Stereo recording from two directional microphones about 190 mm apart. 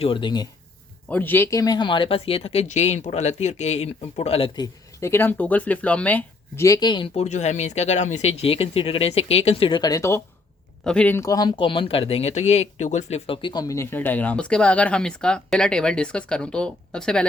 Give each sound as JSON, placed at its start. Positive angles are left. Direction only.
{"t": 0.0, "sound": "speech", "side_deg": 25}
{"t": 1.1, "sound": "speech", "side_deg": 10}